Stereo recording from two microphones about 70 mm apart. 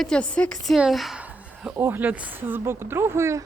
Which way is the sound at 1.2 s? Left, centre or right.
Right.